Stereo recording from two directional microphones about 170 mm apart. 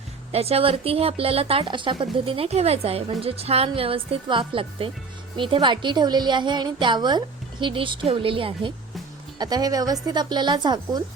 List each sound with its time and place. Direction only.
0.3 s a woman's voice: 35° right (ahead or behind)